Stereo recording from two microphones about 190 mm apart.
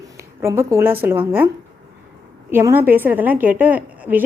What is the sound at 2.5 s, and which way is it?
A woman's voice, 10° right (ahead or behind).